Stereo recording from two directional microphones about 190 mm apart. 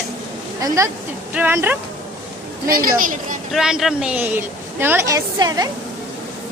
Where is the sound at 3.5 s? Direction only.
Centre (ahead or behind); by 5.7 s 20° right (ahead or behind).